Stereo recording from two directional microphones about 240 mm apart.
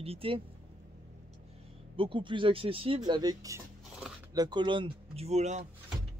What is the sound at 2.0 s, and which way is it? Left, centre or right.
Speech, right.